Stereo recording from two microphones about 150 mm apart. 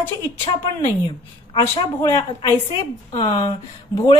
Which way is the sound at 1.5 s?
20° left (ahead or behind).